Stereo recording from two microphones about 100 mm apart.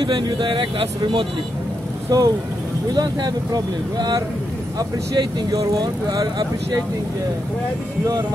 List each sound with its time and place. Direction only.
0.0 s speech: 55° right (ahead or behind)
2.1 s speech: 40° right (ahead or behind)